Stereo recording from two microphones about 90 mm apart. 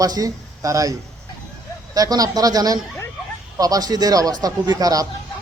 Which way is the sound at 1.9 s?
45° right (ahead or behind).